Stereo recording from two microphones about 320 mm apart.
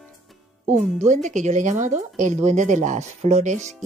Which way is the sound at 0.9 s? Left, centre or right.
Right.